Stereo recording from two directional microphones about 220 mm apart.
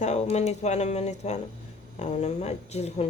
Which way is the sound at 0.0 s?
30° left (ahead or behind).